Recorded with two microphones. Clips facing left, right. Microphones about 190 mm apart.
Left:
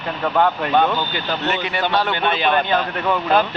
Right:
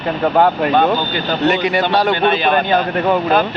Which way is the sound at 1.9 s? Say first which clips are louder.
Right 4 dB; 40° right (ahead or behind).